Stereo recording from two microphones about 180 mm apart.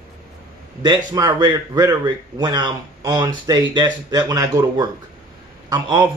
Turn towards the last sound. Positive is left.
turn(degrees=-20)  # may be behind; listen again after turning